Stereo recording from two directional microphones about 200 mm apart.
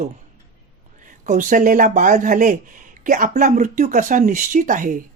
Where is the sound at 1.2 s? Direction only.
40° right (ahead or behind).